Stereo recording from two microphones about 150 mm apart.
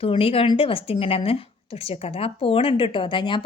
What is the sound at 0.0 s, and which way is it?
A woman's voice, 40° left (ahead or behind).